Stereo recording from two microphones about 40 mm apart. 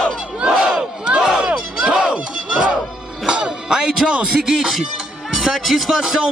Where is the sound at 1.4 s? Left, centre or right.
Right.